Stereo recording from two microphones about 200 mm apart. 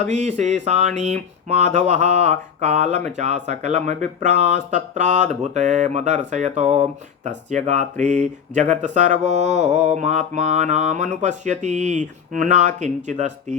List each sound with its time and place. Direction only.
0.0 s speech: 35° right (ahead or behind)